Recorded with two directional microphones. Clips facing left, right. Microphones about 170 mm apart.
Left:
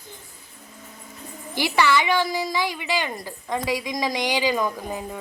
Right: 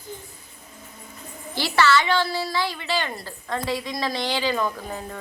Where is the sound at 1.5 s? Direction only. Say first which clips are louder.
Even; 15° left (ahead or behind).